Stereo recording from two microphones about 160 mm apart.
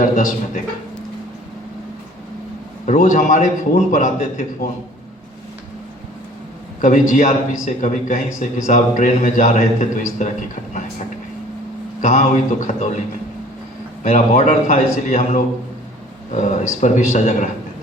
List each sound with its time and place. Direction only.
0.0 s a man's voice: 55° left (ahead or behind)
2.8 s a man's voice: 55° left (ahead or behind)
6.8 s a man's voice: 55° left (ahead or behind)
12.0 s a man's voice: 50° left (ahead or behind)
14.0 s a man's voice: 50° left (ahead or behind)